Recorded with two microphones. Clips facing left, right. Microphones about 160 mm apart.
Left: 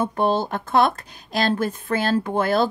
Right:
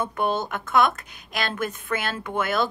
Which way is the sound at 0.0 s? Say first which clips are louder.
Left 4 dB; 30° left (ahead or behind).